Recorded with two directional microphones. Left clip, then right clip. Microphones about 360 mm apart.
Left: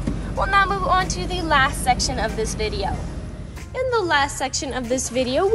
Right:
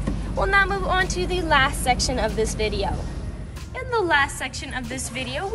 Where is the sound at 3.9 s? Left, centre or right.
Centre.